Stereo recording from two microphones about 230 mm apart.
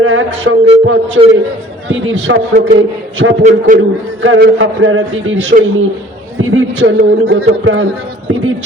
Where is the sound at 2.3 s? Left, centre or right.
Right.